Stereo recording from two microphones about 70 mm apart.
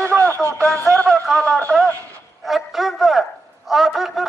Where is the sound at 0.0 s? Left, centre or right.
Right.